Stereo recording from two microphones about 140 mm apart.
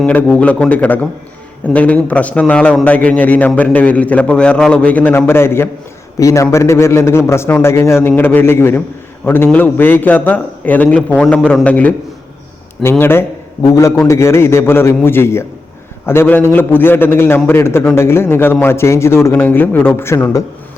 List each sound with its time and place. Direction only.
0.0 s a man's voice: 10° left (ahead or behind)